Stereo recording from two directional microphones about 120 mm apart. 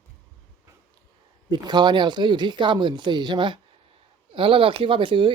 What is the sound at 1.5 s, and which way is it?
Speech, 35° right (ahead or behind).